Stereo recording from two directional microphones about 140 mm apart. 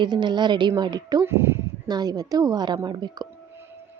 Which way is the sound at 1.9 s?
30° right (ahead or behind).